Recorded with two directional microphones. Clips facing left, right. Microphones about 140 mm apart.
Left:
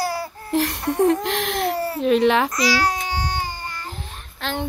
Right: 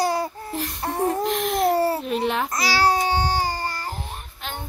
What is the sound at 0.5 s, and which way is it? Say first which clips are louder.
Speech: left 10 dB; 85° left.